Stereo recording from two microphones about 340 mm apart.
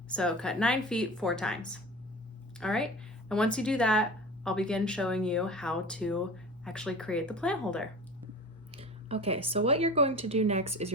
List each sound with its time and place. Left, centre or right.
0.1 s speech: centre
8.7 s speech: centre